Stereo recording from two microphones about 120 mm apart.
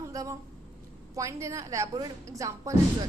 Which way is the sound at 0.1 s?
30° right (ahead or behind).